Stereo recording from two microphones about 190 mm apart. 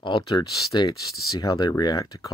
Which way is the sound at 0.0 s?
25° left (ahead or behind).